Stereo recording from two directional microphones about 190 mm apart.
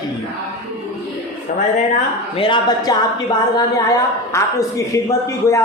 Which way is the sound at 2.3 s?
25° left (ahead or behind).